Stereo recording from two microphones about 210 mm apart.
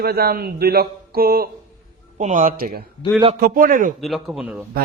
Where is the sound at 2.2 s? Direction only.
35° right (ahead or behind).